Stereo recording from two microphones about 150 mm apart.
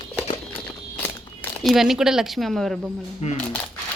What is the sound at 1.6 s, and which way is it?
A woman's voice, centre (ahead or behind).